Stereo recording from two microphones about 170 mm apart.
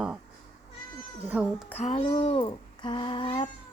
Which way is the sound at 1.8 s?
35° left (ahead or behind).